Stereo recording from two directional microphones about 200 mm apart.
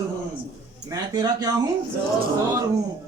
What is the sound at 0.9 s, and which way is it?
Speech, 20° right (ahead or behind).